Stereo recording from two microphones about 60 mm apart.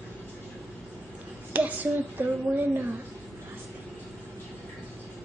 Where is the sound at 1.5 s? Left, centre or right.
Right.